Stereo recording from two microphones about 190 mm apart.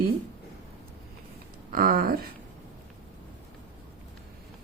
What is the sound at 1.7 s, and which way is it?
Speech, 50° right (ahead or behind).